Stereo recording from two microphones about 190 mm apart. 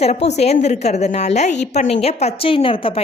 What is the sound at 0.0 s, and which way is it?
A woman's voice, 35° left (ahead or behind).